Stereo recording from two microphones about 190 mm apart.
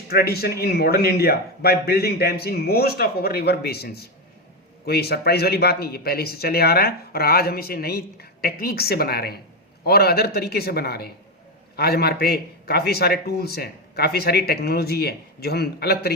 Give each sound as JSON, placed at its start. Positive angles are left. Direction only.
{"t": 0.1, "sound": "speech", "side_deg": 55}